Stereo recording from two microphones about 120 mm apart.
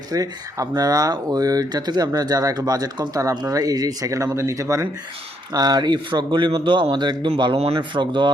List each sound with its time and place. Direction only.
0.1 s speech: 30° right (ahead or behind)